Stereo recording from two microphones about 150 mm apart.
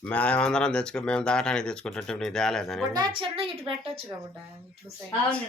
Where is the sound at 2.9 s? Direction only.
30° right (ahead or behind).